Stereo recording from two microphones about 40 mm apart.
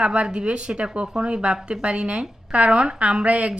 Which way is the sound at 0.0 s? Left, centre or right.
Right.